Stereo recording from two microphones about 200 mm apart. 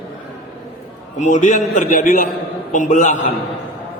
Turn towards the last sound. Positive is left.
turn(degrees=40)  # may be behind; listen again after turning